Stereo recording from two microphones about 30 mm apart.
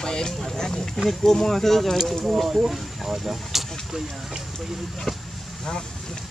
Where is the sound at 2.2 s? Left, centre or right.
Centre.